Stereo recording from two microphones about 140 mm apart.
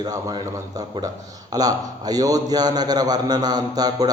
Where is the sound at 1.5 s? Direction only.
25° right (ahead or behind).